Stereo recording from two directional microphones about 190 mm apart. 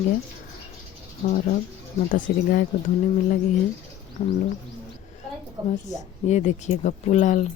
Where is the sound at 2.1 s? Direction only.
45° left (ahead or behind).